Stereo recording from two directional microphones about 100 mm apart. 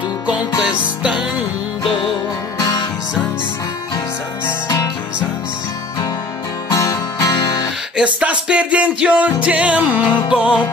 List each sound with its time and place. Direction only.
0.6 s music: 5° right (ahead or behind)
1.8 s music: 55° left (ahead or behind)
2.6 s music: 40° left (ahead or behind)
6.7 s music: 35° left (ahead or behind)
7.9 s music: 10° right (ahead or behind)